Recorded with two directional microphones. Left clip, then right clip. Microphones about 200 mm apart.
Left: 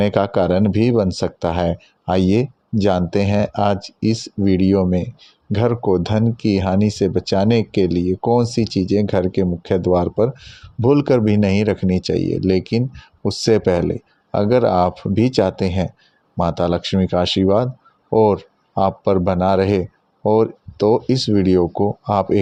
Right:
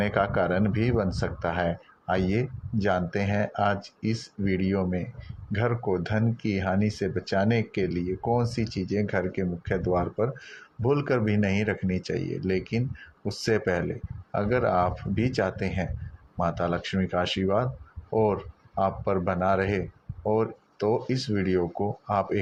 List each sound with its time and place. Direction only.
0.0 s speech: 60° left (ahead or behind)